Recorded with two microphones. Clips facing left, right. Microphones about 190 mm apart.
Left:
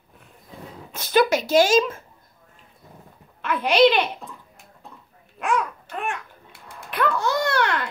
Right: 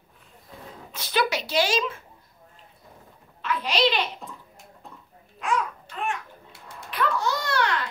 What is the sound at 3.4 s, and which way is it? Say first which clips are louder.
Speech: left 7 dB; 55° left (ahead or behind).